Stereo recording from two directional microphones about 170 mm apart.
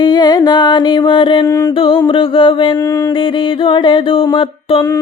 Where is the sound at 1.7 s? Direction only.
30° left (ahead or behind).